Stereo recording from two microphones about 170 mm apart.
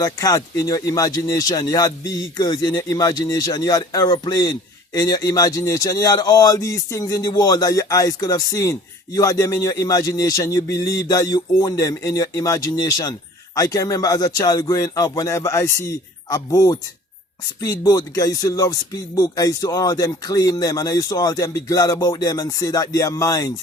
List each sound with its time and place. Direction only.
0.0 s speech: 20° left (ahead or behind)